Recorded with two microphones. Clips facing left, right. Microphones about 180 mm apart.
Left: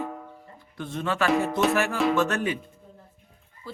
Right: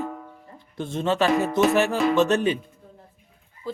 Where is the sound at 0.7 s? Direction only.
25° right (ahead or behind).